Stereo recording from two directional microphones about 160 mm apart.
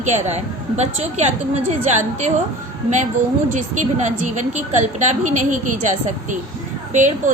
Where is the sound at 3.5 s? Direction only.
50° right (ahead or behind).